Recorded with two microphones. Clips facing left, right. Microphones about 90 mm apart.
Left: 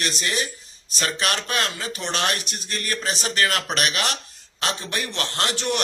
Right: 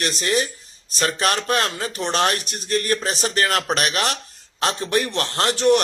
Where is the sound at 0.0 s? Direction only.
40° right (ahead or behind).